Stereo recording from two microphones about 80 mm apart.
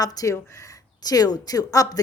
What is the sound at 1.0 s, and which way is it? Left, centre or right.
Speech, left.